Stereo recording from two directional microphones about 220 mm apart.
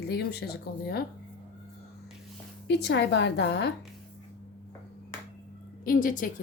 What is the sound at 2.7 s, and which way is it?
Speech, 50° left (ahead or behind).